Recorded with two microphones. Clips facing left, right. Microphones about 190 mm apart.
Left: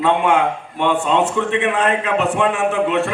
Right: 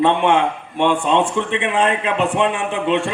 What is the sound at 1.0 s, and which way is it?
A man's voice, 15° right (ahead or behind).